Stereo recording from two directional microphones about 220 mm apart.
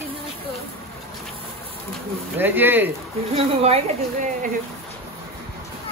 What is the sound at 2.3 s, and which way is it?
Speech, 10° right (ahead or behind).